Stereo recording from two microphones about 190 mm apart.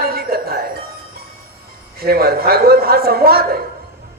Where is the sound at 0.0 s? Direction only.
50° right (ahead or behind).